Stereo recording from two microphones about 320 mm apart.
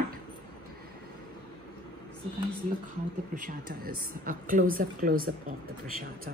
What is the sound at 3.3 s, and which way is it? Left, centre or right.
A woman's voice, right.